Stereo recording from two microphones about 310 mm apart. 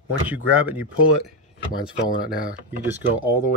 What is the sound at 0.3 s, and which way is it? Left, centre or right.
Speech, centre.